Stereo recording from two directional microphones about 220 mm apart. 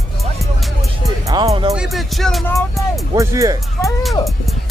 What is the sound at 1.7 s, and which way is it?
Music, centre (ahead or behind).